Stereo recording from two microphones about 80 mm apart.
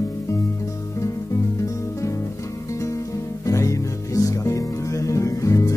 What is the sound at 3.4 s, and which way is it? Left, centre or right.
Music, left.